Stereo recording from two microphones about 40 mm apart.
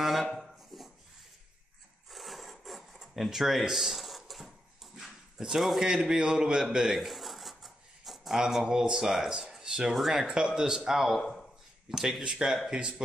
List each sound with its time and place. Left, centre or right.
0.0 s a sound: centre
2.0 s filing: centre
3.3 s a man's voice: centre
6.8 s a sound: centre
8.4 s speech: centre
8.6 s speech: right
8.9 s speech: centre
12.4 s speech: right